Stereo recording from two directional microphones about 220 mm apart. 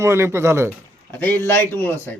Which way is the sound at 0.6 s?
5° left (ahead or behind).